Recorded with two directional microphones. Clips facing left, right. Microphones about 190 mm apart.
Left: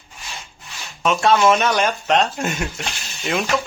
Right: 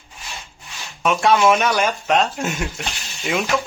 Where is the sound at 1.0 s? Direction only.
10° right (ahead or behind).